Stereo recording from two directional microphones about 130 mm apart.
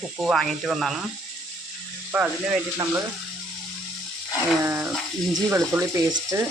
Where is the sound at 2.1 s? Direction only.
10° right (ahead or behind).